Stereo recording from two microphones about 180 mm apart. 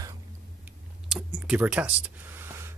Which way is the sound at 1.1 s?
5° right (ahead or behind).